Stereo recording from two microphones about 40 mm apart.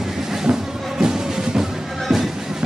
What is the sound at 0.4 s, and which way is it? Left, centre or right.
Music, centre.